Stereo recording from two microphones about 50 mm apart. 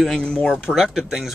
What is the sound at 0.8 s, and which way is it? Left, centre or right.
Speech, centre.